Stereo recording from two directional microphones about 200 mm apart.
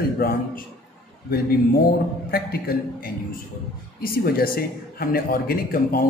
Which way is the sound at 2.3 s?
50° left (ahead or behind).